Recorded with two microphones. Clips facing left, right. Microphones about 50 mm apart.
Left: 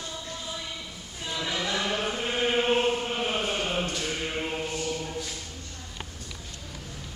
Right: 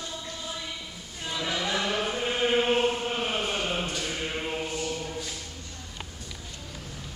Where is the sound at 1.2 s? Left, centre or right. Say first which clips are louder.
Even; centre.